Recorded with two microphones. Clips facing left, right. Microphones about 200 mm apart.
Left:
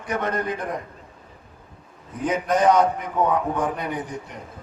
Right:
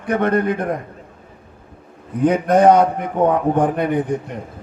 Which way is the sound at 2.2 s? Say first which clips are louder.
Right 7 dB; 60° right (ahead or behind).